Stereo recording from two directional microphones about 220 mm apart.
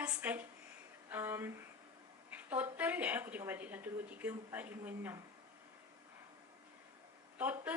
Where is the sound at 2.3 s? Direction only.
10° right (ahead or behind).